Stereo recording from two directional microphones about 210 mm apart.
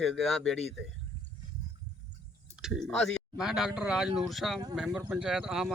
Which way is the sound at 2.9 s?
5° left (ahead or behind).